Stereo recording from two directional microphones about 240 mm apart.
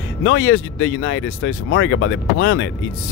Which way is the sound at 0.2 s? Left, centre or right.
Left.